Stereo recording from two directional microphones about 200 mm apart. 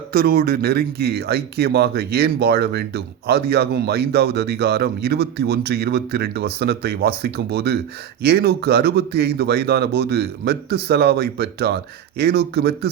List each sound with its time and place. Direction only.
0.1 s speech: 50° right (ahead or behind)